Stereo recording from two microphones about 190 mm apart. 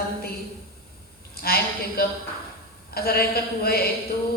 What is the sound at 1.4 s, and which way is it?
A woman's voice, 55° left (ahead or behind).